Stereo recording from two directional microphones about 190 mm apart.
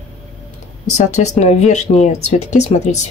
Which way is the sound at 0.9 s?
35° left (ahead or behind).